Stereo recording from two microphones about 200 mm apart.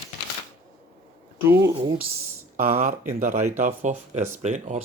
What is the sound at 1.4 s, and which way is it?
Speech, 15° right (ahead or behind).